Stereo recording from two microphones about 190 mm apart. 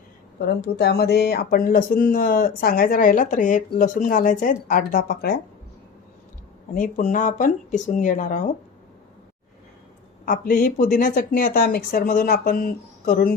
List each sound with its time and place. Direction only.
0.3 s speech: 60° left (ahead or behind)
6.7 s speech: 45° left (ahead or behind)
10.2 s speech: 45° left (ahead or behind)